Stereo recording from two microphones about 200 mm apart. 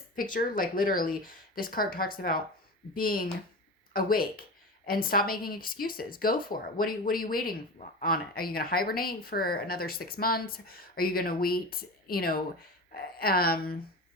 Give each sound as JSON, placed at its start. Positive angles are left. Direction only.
{"t": 0.2, "sound": "a woman's voice", "side_deg": 45}